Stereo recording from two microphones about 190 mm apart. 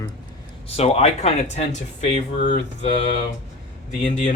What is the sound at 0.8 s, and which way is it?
Speech, 35° left (ahead or behind).